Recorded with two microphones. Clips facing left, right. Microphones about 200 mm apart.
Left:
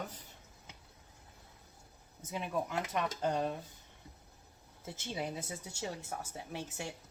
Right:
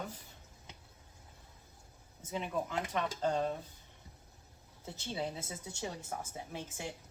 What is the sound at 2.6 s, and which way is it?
Speech, 15° left (ahead or behind).